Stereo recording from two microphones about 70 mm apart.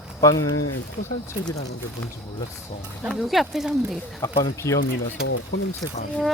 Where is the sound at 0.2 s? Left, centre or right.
Left.